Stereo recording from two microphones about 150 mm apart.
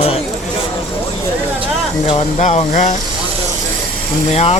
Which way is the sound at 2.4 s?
50° left (ahead or behind).